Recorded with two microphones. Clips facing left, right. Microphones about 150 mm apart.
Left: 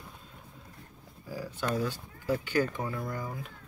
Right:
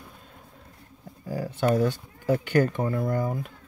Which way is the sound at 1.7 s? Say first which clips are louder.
Right 8 dB; 60° right (ahead or behind).